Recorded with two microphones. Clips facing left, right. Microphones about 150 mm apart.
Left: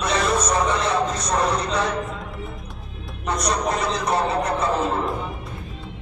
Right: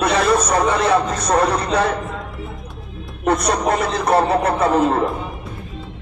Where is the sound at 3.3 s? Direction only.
55° right (ahead or behind).